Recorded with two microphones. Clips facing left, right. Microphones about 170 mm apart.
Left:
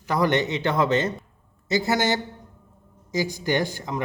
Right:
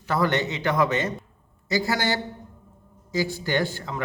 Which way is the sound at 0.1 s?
20° left (ahead or behind).